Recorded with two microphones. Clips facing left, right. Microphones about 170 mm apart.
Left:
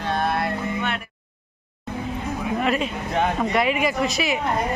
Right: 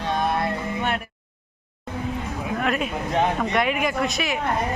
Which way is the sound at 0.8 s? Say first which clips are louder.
Right 1 dB; 45° right (ahead or behind).